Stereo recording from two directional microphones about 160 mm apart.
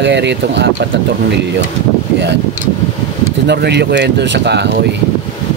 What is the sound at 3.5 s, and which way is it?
Speech, 90° right.